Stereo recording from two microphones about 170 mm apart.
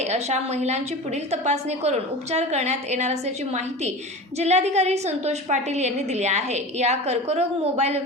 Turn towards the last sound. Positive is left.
turn(degrees=-40)  # may be behind; listen again after turning